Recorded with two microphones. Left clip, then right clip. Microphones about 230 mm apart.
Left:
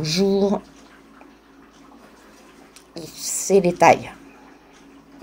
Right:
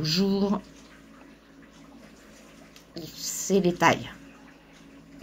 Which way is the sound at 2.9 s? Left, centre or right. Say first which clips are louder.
Left 5 dB; centre.